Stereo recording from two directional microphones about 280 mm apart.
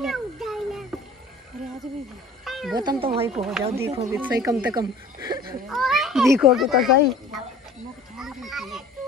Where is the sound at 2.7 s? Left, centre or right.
Centre.